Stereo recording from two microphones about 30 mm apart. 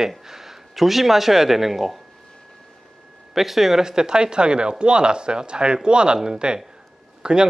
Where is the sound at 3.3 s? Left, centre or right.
Centre.